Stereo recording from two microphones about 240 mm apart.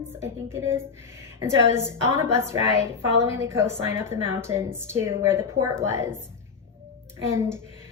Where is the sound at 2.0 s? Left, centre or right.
Centre.